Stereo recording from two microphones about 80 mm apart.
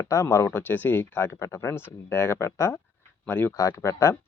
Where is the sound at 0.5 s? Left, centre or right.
Left.